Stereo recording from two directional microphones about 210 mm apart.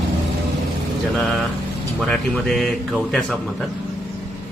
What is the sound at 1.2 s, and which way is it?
Speech, centre (ahead or behind).